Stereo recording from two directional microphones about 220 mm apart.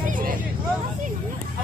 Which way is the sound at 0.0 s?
40° right (ahead or behind).